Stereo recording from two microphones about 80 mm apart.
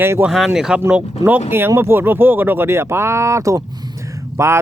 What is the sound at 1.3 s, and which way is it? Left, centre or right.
Speech, right.